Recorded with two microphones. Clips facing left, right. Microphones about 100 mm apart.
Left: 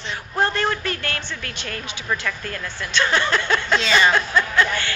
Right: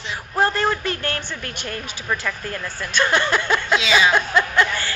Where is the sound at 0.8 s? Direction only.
35° right (ahead or behind).